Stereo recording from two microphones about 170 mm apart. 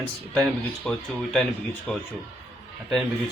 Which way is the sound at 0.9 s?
5° left (ahead or behind).